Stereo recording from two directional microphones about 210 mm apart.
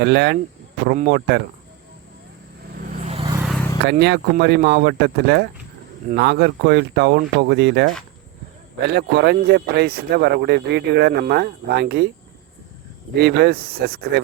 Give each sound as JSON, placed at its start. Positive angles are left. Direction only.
{"t": 0.0, "sound": "speech", "side_deg": -50}
{"t": 2.7, "sound": "vehicle", "side_deg": -40}
{"t": 3.8, "sound": "speech", "side_deg": -55}
{"t": 8.9, "sound": "speech", "side_deg": -50}
{"t": 13.1, "sound": "speech", "side_deg": -50}